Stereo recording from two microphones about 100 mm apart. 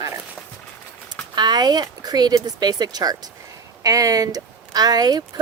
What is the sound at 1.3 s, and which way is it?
Speech, 45° right (ahead or behind).